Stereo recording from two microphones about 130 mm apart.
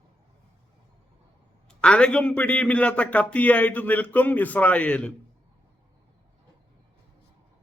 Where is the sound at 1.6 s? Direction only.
5° left (ahead or behind).